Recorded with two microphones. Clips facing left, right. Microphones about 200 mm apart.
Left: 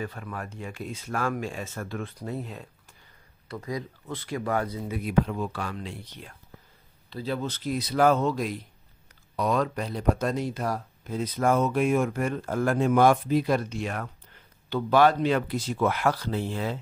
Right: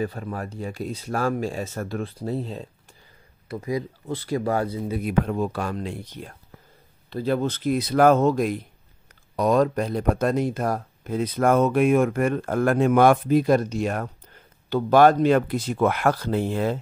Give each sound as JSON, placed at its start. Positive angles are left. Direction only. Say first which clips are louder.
{"t": 0.0, "sound": "speech", "louder": "right 6 dB", "side_deg": -35}
{"t": 5.0, "sound": "speech", "louder": "right 1 dB", "side_deg": -50}